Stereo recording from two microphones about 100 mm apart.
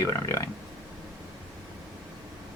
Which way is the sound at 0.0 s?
30° left (ahead or behind).